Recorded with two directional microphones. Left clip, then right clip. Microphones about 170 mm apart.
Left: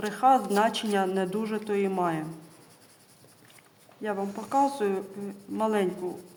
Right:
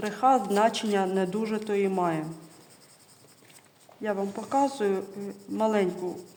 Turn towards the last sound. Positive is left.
turn(degrees=-20)  # may be behind; listen again after turning